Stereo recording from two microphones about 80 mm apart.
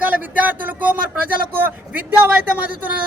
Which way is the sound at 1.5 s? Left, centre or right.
Centre.